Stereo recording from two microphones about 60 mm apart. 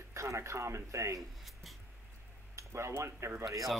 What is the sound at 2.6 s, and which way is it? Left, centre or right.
Speech, right.